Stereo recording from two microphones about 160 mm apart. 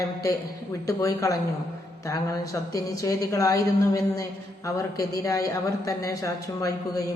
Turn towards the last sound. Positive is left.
turn(degrees=20)  # may be behind; listen again after turning